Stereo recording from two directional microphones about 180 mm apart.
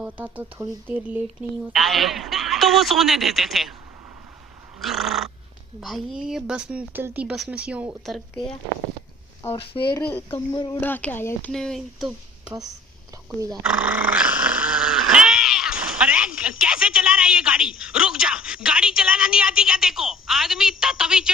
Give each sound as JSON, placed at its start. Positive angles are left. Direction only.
{"t": 0.0, "sound": "speech", "side_deg": -10}
{"t": 4.8, "sound": "speech", "side_deg": 0}
{"t": 9.4, "sound": "speech", "side_deg": 15}
{"t": 10.3, "sound": "speech", "side_deg": 25}
{"t": 10.8, "sound": "speech", "side_deg": 10}
{"t": 13.5, "sound": "growling", "side_deg": -5}